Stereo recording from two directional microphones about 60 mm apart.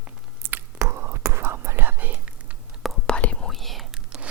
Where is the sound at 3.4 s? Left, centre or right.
Centre.